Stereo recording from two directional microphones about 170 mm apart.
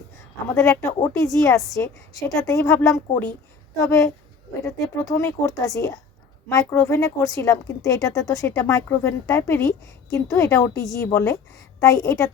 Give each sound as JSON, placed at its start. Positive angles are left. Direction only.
{"t": 0.5, "sound": "a woman's voice", "side_deg": 15}